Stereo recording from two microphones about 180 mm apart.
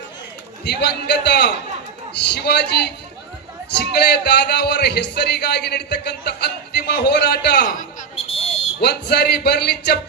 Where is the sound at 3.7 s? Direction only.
70° left (ahead or behind).